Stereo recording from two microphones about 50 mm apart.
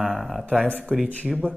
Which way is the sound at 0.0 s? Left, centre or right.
Centre.